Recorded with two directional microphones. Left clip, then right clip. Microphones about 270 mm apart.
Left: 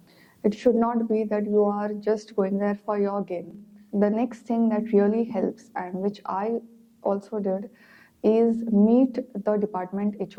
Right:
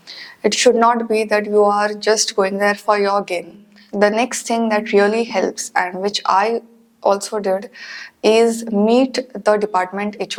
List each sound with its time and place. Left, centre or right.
0.2 s a woman's voice: centre
8.6 s a woman's voice: centre
8.9 s a woman's voice: centre